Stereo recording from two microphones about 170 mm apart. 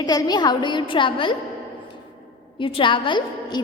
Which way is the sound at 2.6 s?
30° left (ahead or behind).